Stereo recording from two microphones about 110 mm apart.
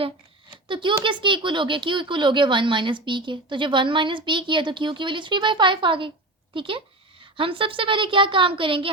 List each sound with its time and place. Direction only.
0.5 s speech: 45° right (ahead or behind)